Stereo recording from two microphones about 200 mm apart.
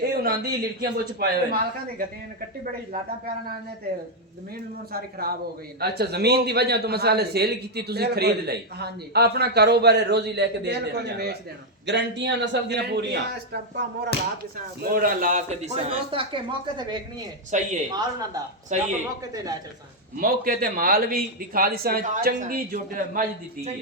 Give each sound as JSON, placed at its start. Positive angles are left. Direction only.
{"t": 0.0, "sound": "a man's voice", "side_deg": -50}
{"t": 4.9, "sound": "a man's voice", "side_deg": -50}
{"t": 17.5, "sound": "a man's voice", "side_deg": -35}
{"t": 18.7, "sound": "a man's voice", "side_deg": -35}
{"t": 20.1, "sound": "a man's voice", "side_deg": -45}